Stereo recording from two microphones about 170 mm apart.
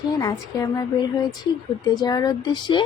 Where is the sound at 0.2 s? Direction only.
20° left (ahead or behind).